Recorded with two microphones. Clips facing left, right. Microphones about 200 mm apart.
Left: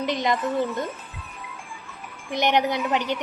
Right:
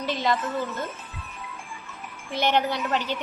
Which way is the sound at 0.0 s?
15° left (ahead or behind).